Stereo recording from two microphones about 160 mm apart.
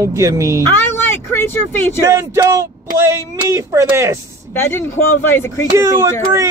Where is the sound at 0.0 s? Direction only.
20° right (ahead or behind).